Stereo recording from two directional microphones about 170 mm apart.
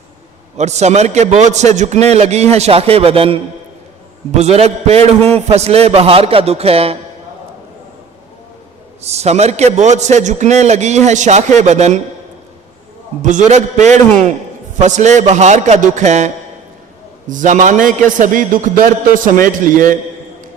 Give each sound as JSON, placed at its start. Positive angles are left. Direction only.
{"t": 0.5, "sound": "a man's voice", "side_deg": -40}
{"t": 9.0, "sound": "a man's voice", "side_deg": -40}
{"t": 13.2, "sound": "a man's voice", "side_deg": -45}